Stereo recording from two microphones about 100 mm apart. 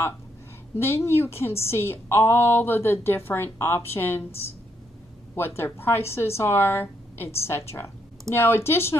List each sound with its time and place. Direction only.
0.7 s a woman's voice: 25° left (ahead or behind)
5.6 s a woman's voice: 25° left (ahead or behind)